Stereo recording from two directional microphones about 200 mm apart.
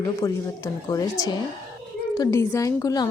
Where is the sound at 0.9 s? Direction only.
15° left (ahead or behind).